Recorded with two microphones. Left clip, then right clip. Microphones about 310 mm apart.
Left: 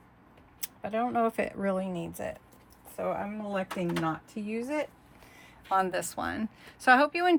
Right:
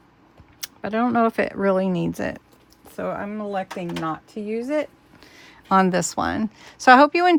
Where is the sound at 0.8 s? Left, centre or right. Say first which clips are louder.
Right 8 dB; right.